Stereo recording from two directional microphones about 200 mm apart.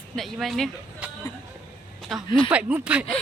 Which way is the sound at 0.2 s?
Centre (ahead or behind).